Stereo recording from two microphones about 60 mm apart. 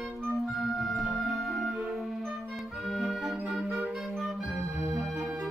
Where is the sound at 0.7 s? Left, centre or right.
Centre.